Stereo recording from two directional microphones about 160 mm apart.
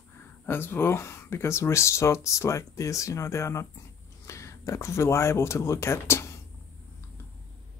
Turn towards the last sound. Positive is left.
turn(degrees=15)  # may be behind; listen again after turning